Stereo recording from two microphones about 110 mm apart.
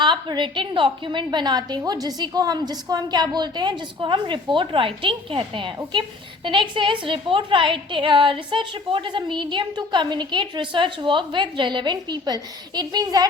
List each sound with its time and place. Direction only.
0.0 s a woman's voice: 45° right (ahead or behind)